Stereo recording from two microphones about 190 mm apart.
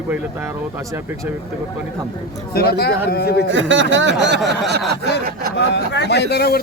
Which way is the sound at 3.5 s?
80° right.